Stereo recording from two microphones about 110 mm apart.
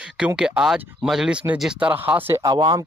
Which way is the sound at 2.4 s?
40° right (ahead or behind).